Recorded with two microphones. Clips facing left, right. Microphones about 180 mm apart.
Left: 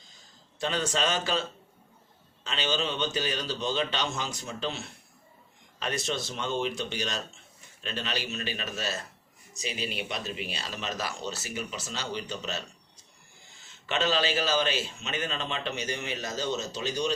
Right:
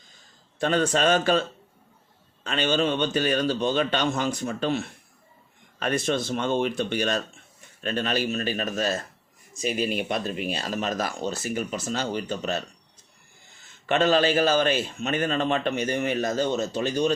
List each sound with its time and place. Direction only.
0.6 s a man's voice: 50° right (ahead or behind)
13.8 s a man's voice: 50° right (ahead or behind)